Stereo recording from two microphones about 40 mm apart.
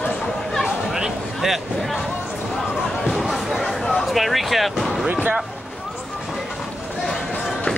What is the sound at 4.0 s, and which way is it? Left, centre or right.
Speech, centre.